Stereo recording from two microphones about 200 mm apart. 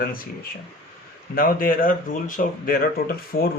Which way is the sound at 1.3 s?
45° left (ahead or behind).